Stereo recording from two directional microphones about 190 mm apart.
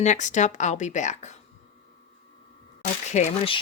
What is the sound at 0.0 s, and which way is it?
Speech, 40° left (ahead or behind).